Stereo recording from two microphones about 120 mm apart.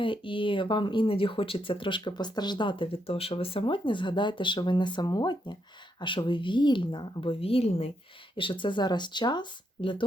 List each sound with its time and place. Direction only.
0.0 s speech: 45° left (ahead or behind)
8.4 s speech: 45° left (ahead or behind)